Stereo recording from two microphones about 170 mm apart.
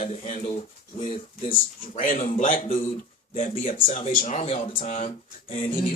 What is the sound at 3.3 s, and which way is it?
Speech, 35° left (ahead or behind).